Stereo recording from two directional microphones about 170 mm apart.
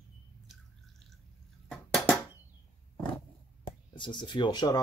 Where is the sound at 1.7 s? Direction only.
5° left (ahead or behind).